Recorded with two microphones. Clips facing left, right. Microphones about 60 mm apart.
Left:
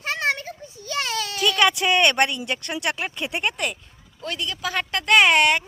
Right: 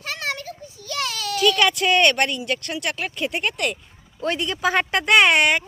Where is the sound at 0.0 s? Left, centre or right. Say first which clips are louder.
Left 4 dB; left; by 2.4 s centre.